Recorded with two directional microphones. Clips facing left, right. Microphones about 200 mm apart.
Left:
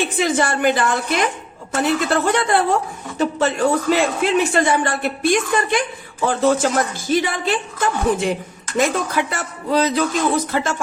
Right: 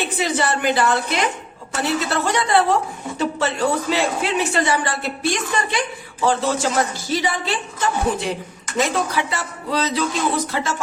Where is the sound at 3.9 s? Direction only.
50° left (ahead or behind).